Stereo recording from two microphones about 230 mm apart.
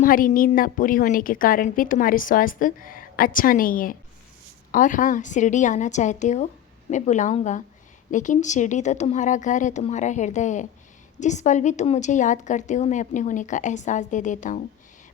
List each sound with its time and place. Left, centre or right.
0.0 s a woman's voice: left